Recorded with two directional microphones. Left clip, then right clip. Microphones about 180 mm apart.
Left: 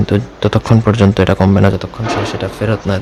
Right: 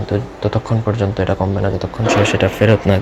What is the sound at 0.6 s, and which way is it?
Speech, 45° left (ahead or behind).